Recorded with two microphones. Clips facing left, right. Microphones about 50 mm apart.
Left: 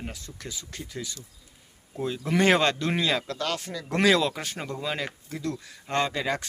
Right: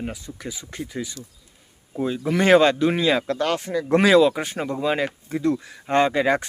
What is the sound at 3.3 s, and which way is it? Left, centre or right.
Speech, right.